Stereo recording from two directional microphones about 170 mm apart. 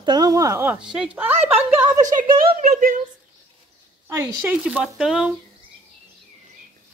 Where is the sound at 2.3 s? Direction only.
30° right (ahead or behind).